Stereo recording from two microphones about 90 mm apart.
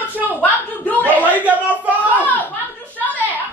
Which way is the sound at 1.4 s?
15° right (ahead or behind).